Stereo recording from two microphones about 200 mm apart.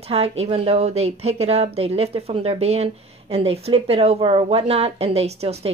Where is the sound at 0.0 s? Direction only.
30° right (ahead or behind).